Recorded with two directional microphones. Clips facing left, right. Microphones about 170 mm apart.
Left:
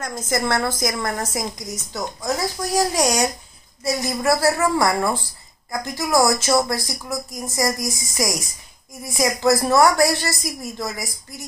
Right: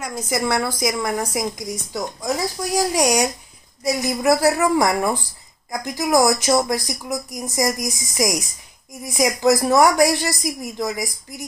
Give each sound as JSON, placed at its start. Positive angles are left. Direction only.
{"t": 0.0, "sound": "speech", "side_deg": -10}